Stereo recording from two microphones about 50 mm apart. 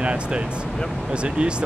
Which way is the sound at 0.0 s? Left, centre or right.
Right.